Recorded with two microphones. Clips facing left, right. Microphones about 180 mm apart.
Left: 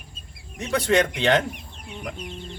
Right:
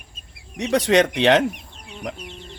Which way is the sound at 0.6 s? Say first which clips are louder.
Right 4 dB; 75° right (ahead or behind).